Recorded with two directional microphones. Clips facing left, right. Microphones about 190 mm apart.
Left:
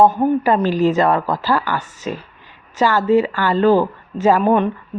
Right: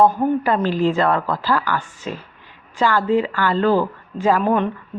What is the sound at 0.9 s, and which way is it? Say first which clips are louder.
Speech: left 3 dB; 20° left (ahead or behind).